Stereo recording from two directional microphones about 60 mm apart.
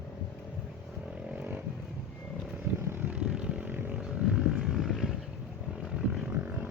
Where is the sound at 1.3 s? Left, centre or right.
Right.